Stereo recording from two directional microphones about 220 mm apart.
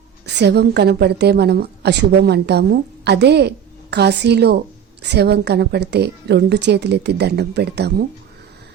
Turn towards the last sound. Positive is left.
turn(degrees=-50)  # may be behind; listen again after turning